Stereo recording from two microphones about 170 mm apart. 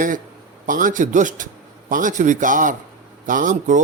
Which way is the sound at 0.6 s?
50° right (ahead or behind).